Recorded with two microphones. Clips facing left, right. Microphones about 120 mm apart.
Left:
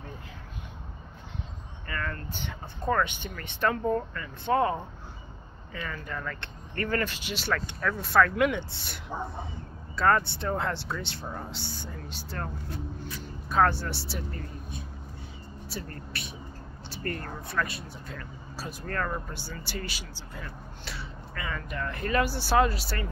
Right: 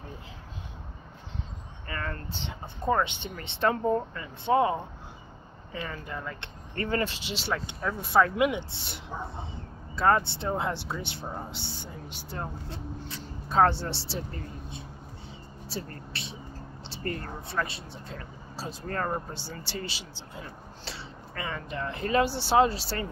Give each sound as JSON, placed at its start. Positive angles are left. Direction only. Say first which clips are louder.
{"t": 1.9, "sound": "speech", "louder": "left 1 dB", "side_deg": -30}
{"t": 5.7, "sound": "speech", "louder": "even", "side_deg": -30}
{"t": 16.1, "sound": "music", "louder": "even", "side_deg": -25}
{"t": 16.9, "sound": "a sound", "louder": "even", "side_deg": -25}
{"t": 17.5, "sound": "speech", "louder": "left 1 dB", "side_deg": -25}